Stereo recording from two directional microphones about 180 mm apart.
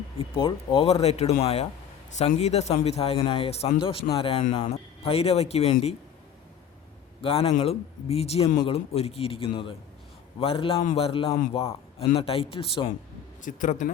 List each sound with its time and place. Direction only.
0.2 s a man's voice: 25° left (ahead or behind)
7.2 s a man's voice: 30° left (ahead or behind)
13.4 s speech: 45° left (ahead or behind)